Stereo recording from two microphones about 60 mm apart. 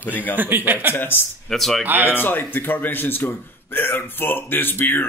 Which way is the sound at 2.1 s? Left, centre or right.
Left.